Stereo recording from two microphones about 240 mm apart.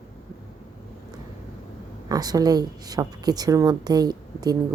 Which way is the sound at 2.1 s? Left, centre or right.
Centre.